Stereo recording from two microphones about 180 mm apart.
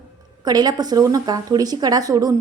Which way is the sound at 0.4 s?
20° right (ahead or behind).